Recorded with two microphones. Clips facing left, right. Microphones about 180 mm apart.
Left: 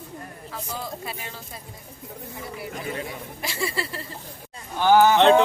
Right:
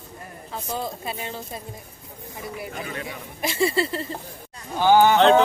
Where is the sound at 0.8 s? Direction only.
25° right (ahead or behind).